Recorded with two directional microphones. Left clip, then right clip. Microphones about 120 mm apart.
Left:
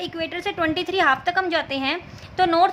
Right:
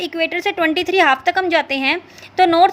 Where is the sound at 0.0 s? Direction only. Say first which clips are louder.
Right 8 dB; 45° right (ahead or behind).